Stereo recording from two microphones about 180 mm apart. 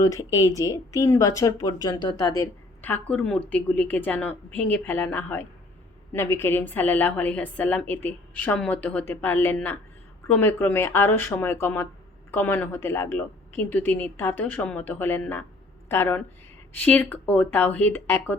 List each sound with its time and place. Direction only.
0.0 s speech: 20° left (ahead or behind)